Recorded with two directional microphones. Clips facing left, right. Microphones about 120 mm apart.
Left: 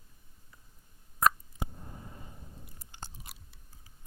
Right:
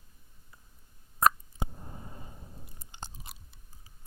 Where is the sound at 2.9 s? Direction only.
20° right (ahead or behind).